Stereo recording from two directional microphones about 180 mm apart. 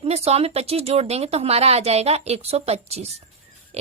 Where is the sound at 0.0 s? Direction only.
35° right (ahead or behind).